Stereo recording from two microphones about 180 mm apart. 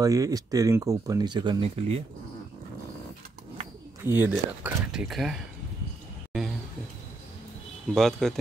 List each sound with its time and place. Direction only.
0.0 s speech: 20° right (ahead or behind)
4.0 s speech: 10° right (ahead or behind)
7.9 s speech: centre (ahead or behind)